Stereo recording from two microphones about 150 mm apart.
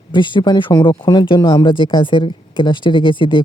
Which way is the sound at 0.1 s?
30° left (ahead or behind).